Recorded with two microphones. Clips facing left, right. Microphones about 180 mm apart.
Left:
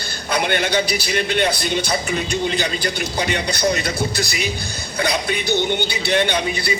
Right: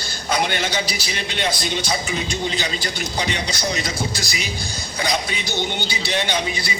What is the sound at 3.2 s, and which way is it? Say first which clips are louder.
A man's voice: left 4 dB; 55° left (ahead or behind).